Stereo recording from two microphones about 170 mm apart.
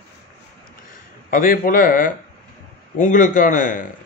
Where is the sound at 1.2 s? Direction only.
55° left (ahead or behind).